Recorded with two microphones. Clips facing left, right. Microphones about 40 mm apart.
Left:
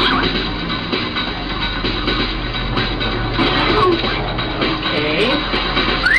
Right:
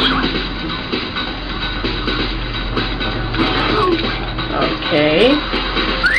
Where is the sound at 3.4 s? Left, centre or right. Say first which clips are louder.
Left 1 dB; centre.